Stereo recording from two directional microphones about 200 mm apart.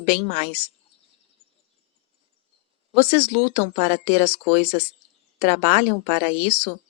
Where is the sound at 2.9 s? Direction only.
30° right (ahead or behind).